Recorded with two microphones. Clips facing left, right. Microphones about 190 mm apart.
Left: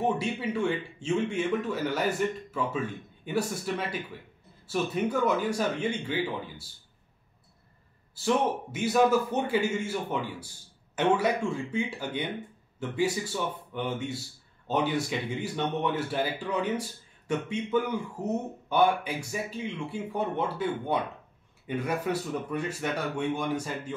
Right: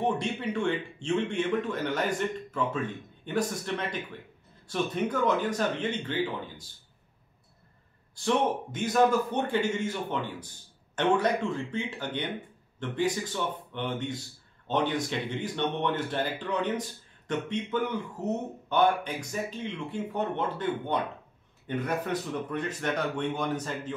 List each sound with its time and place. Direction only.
0.0 s a man's voice: 5° left (ahead or behind)
8.2 s a man's voice: 5° left (ahead or behind)